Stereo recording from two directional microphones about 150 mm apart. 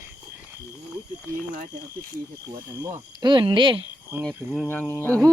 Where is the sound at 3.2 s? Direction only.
30° right (ahead or behind).